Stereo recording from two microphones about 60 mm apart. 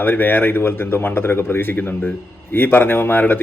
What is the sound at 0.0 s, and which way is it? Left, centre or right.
A man's voice, left.